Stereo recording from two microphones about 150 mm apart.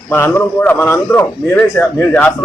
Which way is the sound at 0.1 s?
10° left (ahead or behind).